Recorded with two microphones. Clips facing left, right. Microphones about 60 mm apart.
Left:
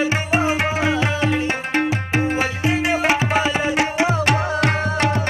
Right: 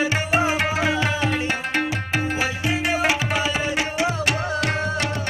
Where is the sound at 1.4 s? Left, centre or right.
Left.